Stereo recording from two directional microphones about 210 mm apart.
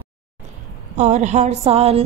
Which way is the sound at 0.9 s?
35° right (ahead or behind).